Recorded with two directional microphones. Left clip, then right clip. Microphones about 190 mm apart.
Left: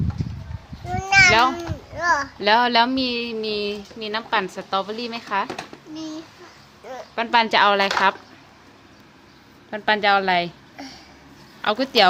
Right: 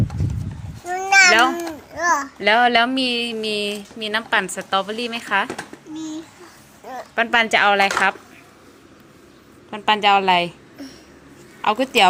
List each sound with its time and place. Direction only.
0.9 s a sound: 25° right (ahead or behind)
1.3 s speech: centre (ahead or behind)
2.0 s a child's voice: 15° right (ahead or behind)
2.4 s speech: 5° left (ahead or behind)
6.8 s speech: 10° right (ahead or behind); by 7.9 s 10° left (ahead or behind)
9.6 s speech: 10° left (ahead or behind)
11.6 s a woman's voice: 5° left (ahead or behind)